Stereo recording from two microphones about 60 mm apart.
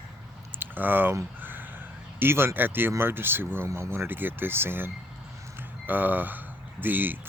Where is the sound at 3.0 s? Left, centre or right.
Right.